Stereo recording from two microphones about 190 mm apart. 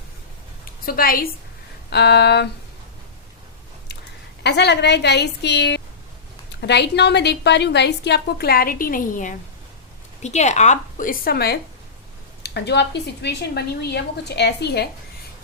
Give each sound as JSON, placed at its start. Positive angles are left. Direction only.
{"t": 0.9, "sound": "a woman's voice", "side_deg": 50}
{"t": 1.9, "sound": "a woman's voice", "side_deg": 60}
{"t": 4.4, "sound": "a woman's voice", "side_deg": 65}